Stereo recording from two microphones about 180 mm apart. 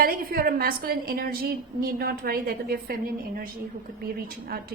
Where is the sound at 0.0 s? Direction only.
55° right (ahead or behind).